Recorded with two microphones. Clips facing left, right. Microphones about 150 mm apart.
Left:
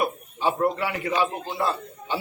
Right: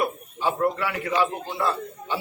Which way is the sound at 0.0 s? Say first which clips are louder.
Left 1 dB; 20° left (ahead or behind).